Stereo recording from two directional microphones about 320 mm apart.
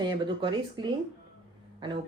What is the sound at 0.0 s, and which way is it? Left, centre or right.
Speech, centre.